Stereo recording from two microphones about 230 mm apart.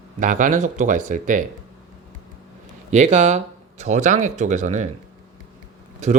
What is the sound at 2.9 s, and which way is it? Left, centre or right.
Speech, right.